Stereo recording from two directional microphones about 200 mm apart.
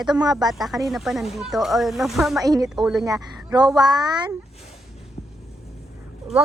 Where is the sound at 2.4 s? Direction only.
20° right (ahead or behind).